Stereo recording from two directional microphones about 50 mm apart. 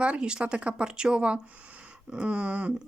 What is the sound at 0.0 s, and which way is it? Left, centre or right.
Speech, right.